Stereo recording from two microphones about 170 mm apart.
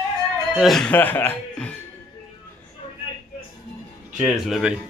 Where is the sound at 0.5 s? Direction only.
Centre (ahead or behind).